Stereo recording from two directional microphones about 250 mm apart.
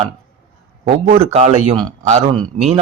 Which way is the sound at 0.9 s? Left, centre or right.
Right.